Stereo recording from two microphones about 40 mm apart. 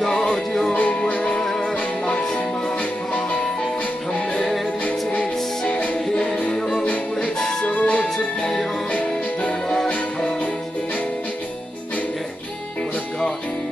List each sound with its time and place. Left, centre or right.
0.0 s music: centre
1.0 s music: left
1.4 s music: centre
2.0 s music: left
4.1 s music: left
6.1 s music: left
7.2 s music: centre
7.6 s music: left
8.4 s music: centre
8.9 s music: left